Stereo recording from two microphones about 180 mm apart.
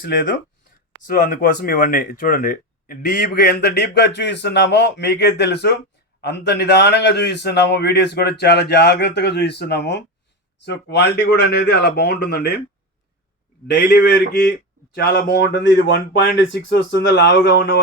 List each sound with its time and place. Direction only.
1.0 s a man's voice: 50° left (ahead or behind); by 12.6 s 70° left (ahead or behind)
13.7 s a man's voice: 70° left (ahead or behind)